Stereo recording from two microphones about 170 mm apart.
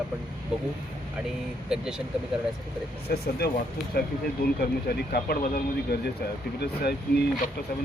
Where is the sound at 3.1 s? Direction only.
65° left (ahead or behind).